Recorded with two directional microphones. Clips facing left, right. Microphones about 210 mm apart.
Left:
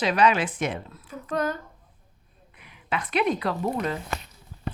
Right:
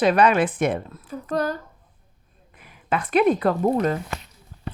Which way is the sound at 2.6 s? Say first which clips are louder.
Right 5 dB; 50° right (ahead or behind).